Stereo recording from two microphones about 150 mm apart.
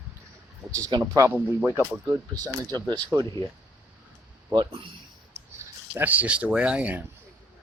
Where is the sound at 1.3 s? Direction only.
15° right (ahead or behind).